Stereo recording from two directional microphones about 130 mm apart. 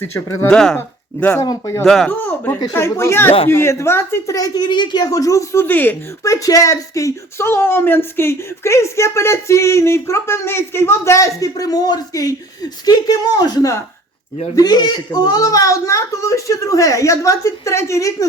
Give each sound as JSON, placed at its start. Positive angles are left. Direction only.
{"t": 0.0, "sound": "a woman's voice", "side_deg": 20}
{"t": 0.5, "sound": "speech", "side_deg": 5}
{"t": 0.8, "sound": "a woman's voice", "side_deg": 20}
{"t": 1.8, "sound": "speech", "side_deg": 5}
{"t": 2.0, "sound": "a woman's voice", "side_deg": 15}
{"t": 4.4, "sound": "a woman's voice", "side_deg": 30}